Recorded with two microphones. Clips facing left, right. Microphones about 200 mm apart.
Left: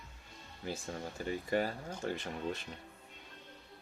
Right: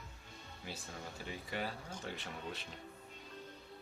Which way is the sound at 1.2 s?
45° left (ahead or behind).